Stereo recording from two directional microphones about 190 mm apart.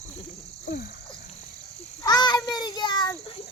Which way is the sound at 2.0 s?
20° left (ahead or behind).